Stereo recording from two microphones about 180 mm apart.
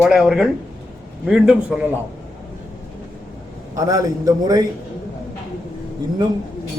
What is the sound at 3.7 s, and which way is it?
Speech, 20° right (ahead or behind).